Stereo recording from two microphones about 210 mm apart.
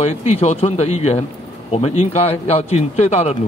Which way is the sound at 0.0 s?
30° left (ahead or behind).